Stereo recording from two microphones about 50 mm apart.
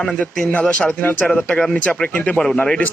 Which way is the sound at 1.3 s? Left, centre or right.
Centre.